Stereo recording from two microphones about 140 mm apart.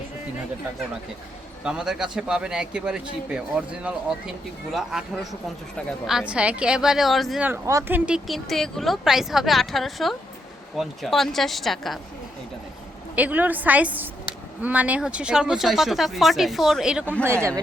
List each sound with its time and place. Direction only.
1.6 s a woman's voice: 5° right (ahead or behind)
6.1 s speech: 5° right (ahead or behind)
7.4 s speech: 20° right (ahead or behind); by 11.9 s centre (ahead or behind)
13.1 s a woman's voice: 10° right (ahead or behind)
17.2 s speech: 20° right (ahead or behind)